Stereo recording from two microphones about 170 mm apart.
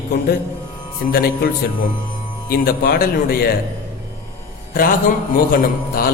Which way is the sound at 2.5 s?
60° left (ahead or behind).